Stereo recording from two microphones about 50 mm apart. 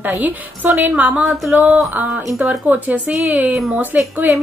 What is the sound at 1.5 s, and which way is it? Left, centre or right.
A woman's voice, right.